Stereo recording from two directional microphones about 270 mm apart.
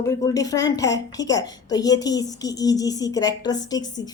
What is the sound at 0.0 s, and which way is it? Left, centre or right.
A woman's voice, centre.